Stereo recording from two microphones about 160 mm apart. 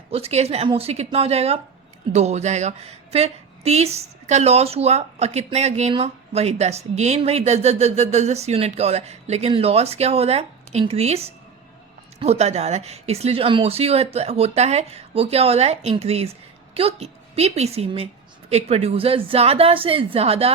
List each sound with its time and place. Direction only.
0.1 s speech: 40° right (ahead or behind)